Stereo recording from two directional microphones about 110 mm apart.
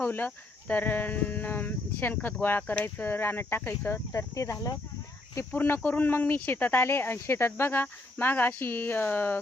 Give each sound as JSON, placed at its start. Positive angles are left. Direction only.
{"t": 0.0, "sound": "speech", "side_deg": 15}
{"t": 5.5, "sound": "speech", "side_deg": 15}